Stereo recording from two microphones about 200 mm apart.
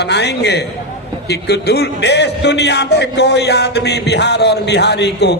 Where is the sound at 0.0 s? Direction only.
55° left (ahead or behind).